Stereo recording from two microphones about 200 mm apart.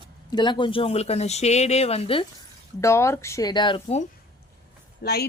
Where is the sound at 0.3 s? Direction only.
20° left (ahead or behind).